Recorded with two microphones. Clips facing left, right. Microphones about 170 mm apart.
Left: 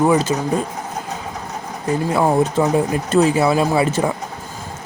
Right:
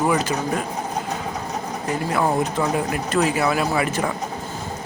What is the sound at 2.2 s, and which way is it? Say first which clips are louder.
Speech: left 5 dB; 30° left (ahead or behind).